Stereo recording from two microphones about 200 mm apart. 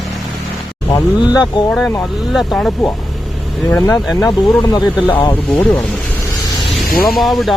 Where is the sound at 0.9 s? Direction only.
20° left (ahead or behind).